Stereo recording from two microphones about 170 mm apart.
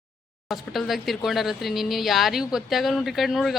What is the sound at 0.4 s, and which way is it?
Speech, centre (ahead or behind).